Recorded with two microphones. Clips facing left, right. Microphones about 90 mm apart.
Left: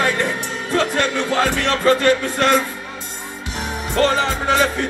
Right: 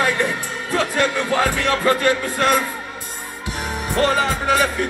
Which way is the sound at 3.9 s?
15° right (ahead or behind).